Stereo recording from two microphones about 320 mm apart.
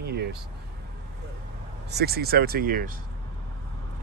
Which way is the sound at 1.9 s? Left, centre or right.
Right.